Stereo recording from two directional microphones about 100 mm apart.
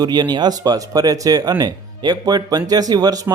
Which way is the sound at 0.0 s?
45° right (ahead or behind).